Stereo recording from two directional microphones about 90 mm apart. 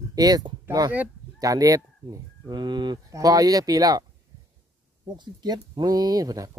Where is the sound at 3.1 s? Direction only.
40° right (ahead or behind).